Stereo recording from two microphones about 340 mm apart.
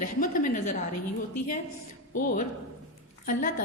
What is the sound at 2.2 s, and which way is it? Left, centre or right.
A woman's voice, left.